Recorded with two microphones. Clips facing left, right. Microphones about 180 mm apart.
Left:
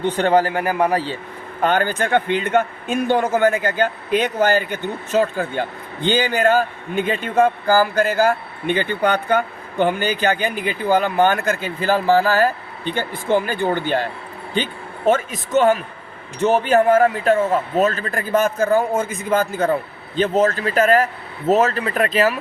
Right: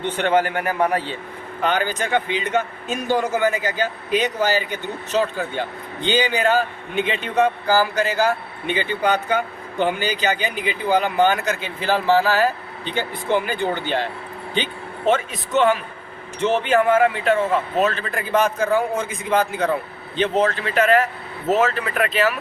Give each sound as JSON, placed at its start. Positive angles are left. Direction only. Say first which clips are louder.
{"t": 0.2, "sound": "speech", "louder": "left 2 dB", "side_deg": 35}
{"t": 1.6, "sound": "a man's voice", "louder": "left 3 dB", "side_deg": 50}